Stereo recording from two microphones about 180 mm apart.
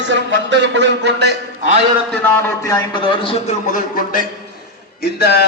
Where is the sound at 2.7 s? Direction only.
25° left (ahead or behind).